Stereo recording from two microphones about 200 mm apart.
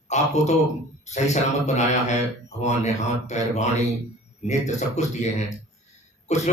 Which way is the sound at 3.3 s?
35° left (ahead or behind).